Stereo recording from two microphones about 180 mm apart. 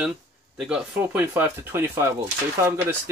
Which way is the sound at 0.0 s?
5° right (ahead or behind).